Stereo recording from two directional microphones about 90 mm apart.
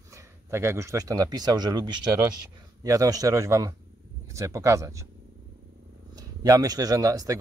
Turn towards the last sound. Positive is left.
turn(degrees=-40)  # may be behind; listen again after turning